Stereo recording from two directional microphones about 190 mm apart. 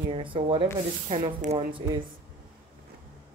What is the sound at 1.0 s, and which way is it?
Speech, 35° right (ahead or behind).